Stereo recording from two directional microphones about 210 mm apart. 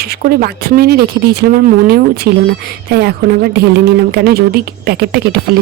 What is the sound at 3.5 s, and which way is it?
Speech, 50° right (ahead or behind).